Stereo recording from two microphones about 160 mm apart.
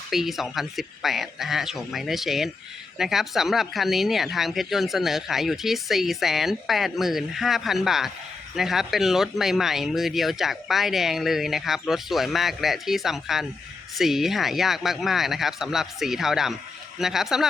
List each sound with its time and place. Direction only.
0.1 s speech: centre (ahead or behind)